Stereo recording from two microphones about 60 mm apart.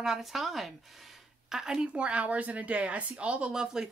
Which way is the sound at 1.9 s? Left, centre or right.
Right.